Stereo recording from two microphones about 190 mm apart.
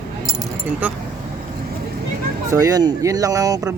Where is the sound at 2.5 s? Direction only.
20° right (ahead or behind).